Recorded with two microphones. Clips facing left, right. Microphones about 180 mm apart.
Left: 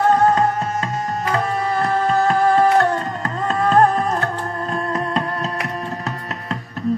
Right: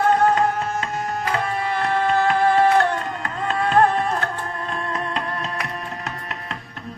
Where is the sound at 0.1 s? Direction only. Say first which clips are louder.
Left 2 dB; 35° left (ahead or behind).